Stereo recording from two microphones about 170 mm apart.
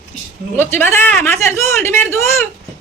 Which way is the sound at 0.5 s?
15° left (ahead or behind).